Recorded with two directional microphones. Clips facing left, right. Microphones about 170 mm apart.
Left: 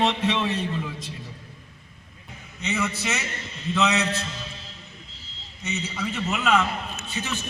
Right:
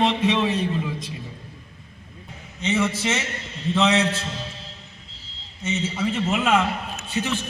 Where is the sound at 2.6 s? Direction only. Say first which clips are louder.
Right 5 dB; 30° right (ahead or behind).